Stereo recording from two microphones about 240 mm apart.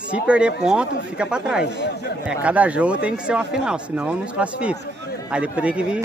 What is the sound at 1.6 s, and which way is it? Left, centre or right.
Speech, left.